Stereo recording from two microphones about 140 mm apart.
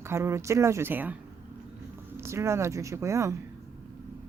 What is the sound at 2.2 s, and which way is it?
Speech, 20° right (ahead or behind).